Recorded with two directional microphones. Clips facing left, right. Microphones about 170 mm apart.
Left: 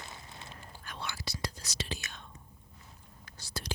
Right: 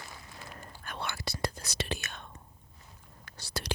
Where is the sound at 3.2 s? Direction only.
70° right (ahead or behind).